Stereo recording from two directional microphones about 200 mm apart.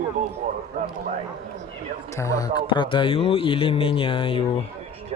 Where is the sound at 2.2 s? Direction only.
15° left (ahead or behind).